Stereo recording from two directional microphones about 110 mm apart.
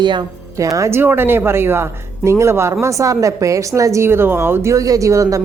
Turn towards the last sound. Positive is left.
turn(degrees=-30)  # may be behind; listen again after turning